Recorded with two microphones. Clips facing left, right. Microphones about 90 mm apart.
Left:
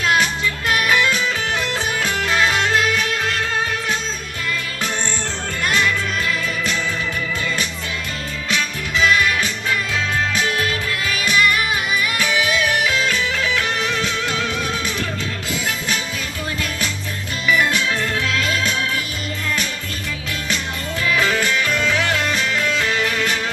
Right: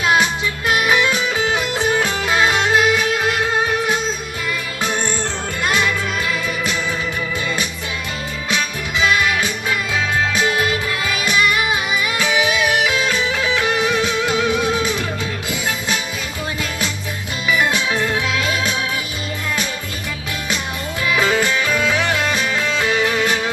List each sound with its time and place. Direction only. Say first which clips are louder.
0.0 s music: right 2 dB; 15° right (ahead or behind)
5.6 s music: right 1 dB; 20° right (ahead or behind)
8.4 s music: right 1 dB; 20° right (ahead or behind)
17.5 s organ: even; 20° right (ahead or behind)
21.0 s music: right 2 dB; 20° right (ahead or behind)